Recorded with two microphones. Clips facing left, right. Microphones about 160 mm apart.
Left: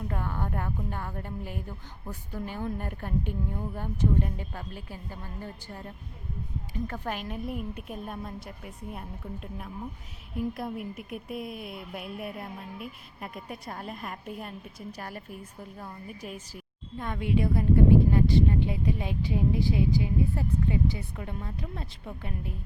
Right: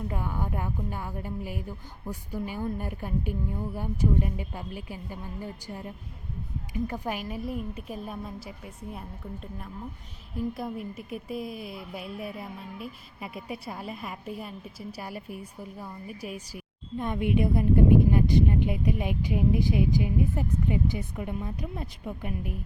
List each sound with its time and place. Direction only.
0.1 s speech: 10° right (ahead or behind)
17.0 s a woman's voice: 20° right (ahead or behind)